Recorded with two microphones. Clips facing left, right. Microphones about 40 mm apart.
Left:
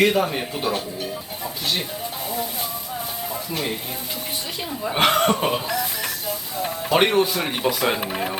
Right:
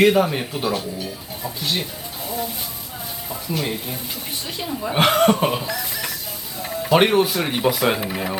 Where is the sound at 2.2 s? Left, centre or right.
Left.